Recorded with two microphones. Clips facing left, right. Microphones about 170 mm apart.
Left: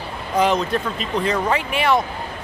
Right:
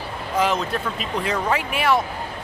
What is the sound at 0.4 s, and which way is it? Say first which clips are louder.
Speech: left 3 dB; 5° right (ahead or behind).